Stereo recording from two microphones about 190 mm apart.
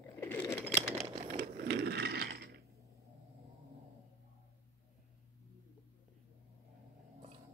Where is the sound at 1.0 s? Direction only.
30° right (ahead or behind).